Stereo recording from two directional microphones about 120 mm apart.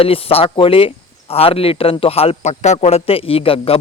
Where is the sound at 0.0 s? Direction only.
55° left (ahead or behind).